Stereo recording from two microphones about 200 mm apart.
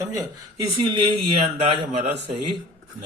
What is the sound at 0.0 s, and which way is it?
A man's voice, 15° right (ahead or behind).